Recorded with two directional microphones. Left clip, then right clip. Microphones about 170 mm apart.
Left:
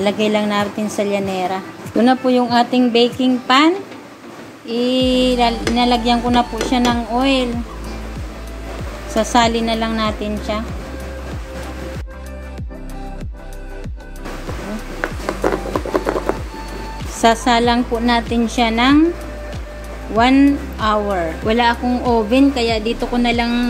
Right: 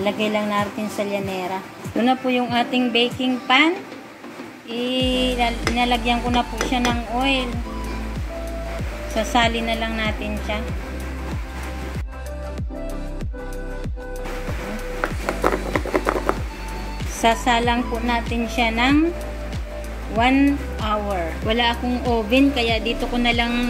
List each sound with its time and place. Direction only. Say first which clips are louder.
0.0 s a woman's voice: left 5 dB; 15° left (ahead or behind)
9.3 s a woman's voice: left 4 dB; 15° left (ahead or behind)
15.4 s music: left 2 dB; centre (ahead or behind)
17.2 s a woman's voice: left 5 dB; 10° left (ahead or behind)
20.2 s a woman's voice: left 5 dB; 10° left (ahead or behind)